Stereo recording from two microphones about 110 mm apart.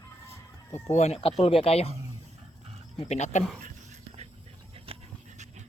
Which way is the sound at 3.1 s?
90° left.